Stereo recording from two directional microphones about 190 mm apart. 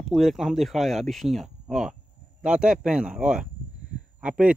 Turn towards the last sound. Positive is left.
turn(degrees=-5)  # may be behind; listen again after turning